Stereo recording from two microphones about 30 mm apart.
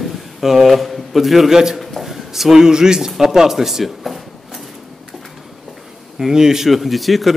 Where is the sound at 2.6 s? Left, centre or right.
Right; by 4.2 s centre.